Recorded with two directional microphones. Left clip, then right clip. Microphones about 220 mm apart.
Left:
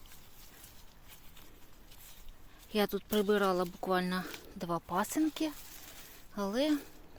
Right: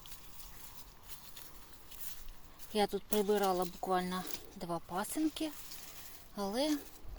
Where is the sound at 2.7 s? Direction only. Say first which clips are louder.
Left 1 dB; 25° left (ahead or behind).